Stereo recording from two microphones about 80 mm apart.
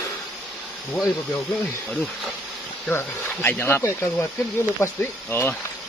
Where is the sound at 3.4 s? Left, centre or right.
Left.